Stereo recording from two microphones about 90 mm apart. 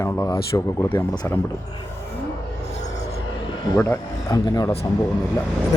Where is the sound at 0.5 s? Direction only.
35° left (ahead or behind).